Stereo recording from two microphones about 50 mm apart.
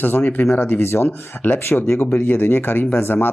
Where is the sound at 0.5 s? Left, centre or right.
Left.